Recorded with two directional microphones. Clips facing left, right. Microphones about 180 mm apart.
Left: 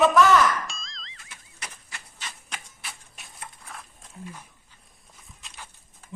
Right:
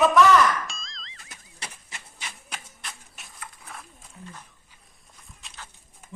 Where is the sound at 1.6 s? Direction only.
30° right (ahead or behind).